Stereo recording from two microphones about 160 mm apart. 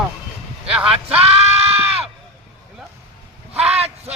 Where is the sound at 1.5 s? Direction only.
40° right (ahead or behind).